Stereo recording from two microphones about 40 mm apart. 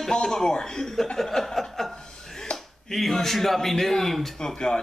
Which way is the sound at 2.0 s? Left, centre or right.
Centre.